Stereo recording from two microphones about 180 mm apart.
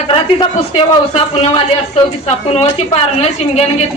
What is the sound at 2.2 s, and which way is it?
A woman's voice, 35° left (ahead or behind).